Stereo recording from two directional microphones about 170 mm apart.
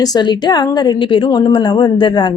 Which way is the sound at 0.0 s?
25° left (ahead or behind).